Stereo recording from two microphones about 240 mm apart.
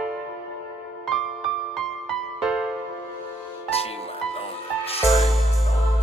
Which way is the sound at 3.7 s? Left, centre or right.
Left.